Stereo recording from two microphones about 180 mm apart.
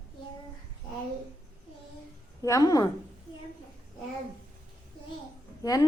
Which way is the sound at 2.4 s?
20° left (ahead or behind).